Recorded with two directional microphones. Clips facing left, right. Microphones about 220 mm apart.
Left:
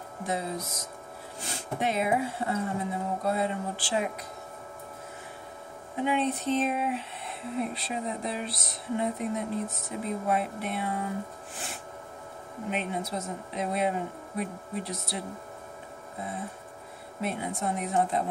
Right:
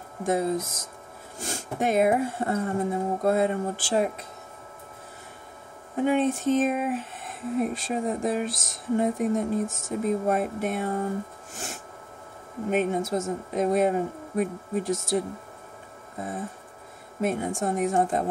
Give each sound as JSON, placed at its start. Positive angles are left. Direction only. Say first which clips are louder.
{"t": 0.2, "sound": "speech", "louder": "right 7 dB", "side_deg": -50}
{"t": 5.9, "sound": "speech", "louder": "right 5 dB", "side_deg": -45}